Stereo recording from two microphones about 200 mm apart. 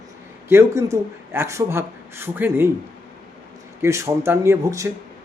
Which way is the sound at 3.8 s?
15° right (ahead or behind).